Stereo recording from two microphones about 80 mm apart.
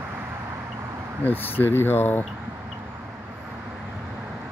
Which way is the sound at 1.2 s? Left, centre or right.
Left.